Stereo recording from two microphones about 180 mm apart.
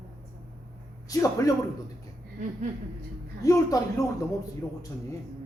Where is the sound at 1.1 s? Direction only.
20° left (ahead or behind).